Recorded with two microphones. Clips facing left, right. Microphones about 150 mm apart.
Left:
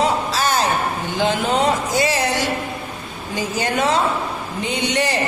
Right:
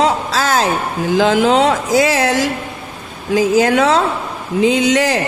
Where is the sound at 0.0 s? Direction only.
90° right.